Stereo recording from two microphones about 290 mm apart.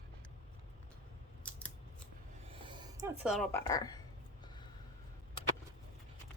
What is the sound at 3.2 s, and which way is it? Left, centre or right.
Speech, centre.